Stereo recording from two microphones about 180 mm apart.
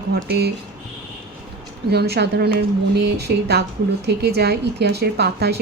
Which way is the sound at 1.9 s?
65° right (ahead or behind).